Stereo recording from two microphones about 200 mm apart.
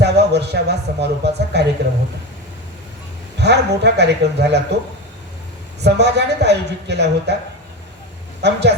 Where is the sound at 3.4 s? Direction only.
55° right (ahead or behind).